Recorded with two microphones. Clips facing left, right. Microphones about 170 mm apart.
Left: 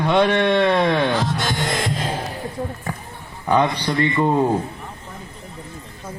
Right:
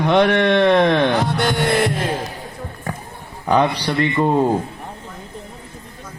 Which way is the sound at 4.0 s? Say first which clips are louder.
Right 1 dB; 15° right (ahead or behind).